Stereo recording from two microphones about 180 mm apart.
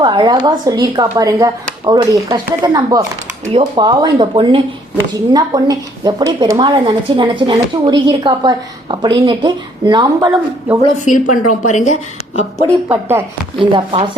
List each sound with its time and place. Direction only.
0.0 s a woman's voice: 25° right (ahead or behind)
11.0 s a woman's voice: 45° left (ahead or behind)
12.9 s speech: 10° right (ahead or behind)
13.6 s a woman's voice: 30° right (ahead or behind)